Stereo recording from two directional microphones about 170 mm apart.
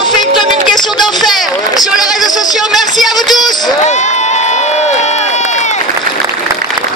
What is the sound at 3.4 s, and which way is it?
Speech, 25° left (ahead or behind).